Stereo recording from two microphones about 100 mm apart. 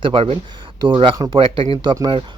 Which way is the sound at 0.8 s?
55° right (ahead or behind).